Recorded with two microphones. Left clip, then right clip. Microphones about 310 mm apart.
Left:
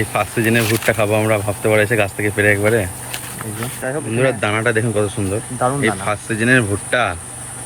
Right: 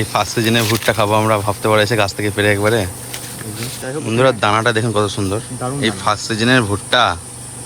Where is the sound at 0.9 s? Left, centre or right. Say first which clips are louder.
Right 2 dB; centre.